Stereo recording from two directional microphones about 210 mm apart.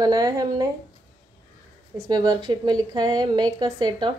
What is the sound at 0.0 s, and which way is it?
Speech, 20° right (ahead or behind).